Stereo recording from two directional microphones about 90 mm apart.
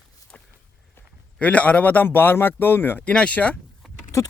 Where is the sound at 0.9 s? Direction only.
15° left (ahead or behind).